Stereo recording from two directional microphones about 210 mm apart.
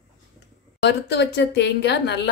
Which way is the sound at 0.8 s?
55° left (ahead or behind).